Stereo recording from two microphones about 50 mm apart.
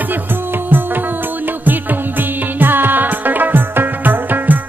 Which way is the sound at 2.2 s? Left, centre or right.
Right.